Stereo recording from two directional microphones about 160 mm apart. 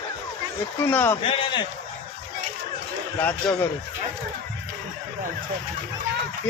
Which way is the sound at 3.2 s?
10° left (ahead or behind).